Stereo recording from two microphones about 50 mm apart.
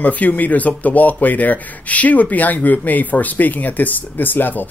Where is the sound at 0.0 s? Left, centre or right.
Left.